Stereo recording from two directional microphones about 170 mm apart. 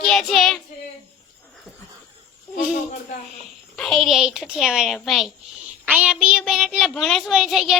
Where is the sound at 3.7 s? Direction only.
Centre (ahead or behind).